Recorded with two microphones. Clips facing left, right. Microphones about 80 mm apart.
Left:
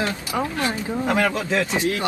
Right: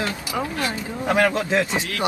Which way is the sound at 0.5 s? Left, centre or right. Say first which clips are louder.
Left 1 dB; left.